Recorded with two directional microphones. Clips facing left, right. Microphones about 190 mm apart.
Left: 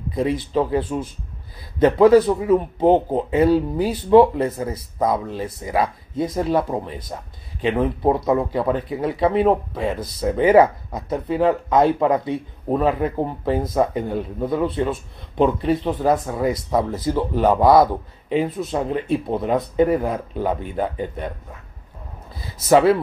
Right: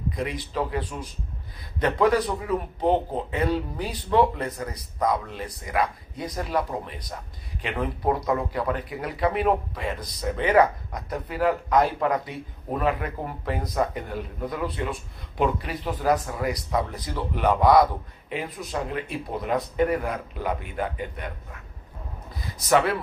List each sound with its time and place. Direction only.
0.1 s speech: 30° left (ahead or behind)
22.6 s speech: 30° left (ahead or behind)